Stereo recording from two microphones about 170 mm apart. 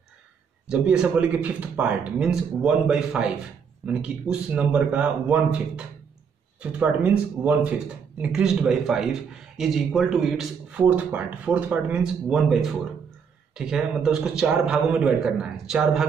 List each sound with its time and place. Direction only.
0.7 s a man's voice: 5° right (ahead or behind)